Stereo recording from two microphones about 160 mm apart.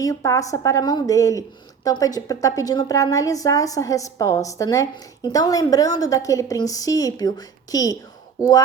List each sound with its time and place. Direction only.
0.0 s a woman's voice: 20° left (ahead or behind)